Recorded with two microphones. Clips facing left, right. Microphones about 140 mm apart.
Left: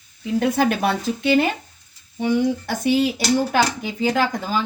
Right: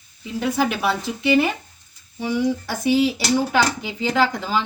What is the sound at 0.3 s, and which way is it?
Speech, 50° left (ahead or behind).